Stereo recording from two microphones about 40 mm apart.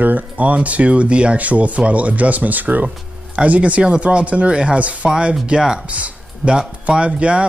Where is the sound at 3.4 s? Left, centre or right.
Right.